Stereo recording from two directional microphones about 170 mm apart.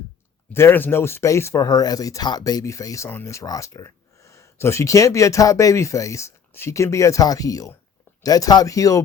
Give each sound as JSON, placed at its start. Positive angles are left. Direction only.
{"t": 0.5, "sound": "speech", "side_deg": 15}